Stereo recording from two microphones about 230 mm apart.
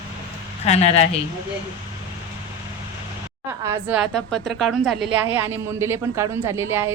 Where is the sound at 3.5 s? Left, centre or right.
Centre.